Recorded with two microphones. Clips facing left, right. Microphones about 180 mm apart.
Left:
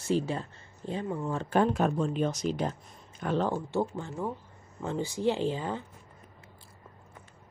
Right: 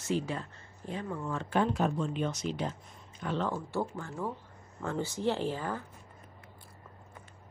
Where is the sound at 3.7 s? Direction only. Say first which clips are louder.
Left 4 dB; 20° left (ahead or behind).